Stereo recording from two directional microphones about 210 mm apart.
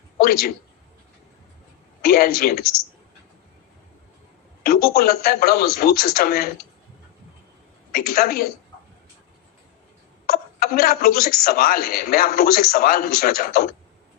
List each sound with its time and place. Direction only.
0.2 s a man's voice: 45° left (ahead or behind)
2.0 s speech: 45° left (ahead or behind)
4.6 s speech: 45° left (ahead or behind)
7.9 s speech: 45° left (ahead or behind)
10.2 s speech: 45° left (ahead or behind)